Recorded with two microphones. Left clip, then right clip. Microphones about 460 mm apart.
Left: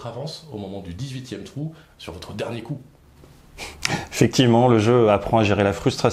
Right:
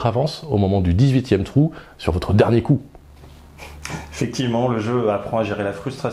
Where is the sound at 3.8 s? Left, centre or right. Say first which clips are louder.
Left 6 dB; left.